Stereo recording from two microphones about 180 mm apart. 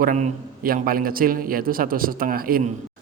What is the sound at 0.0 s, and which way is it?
A woman's voice, 45° right (ahead or behind).